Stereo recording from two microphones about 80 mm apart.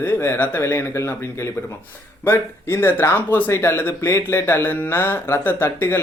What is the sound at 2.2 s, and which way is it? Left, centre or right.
Speech, left.